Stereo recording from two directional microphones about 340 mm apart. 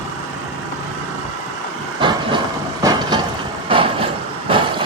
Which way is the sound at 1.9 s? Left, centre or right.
Centre.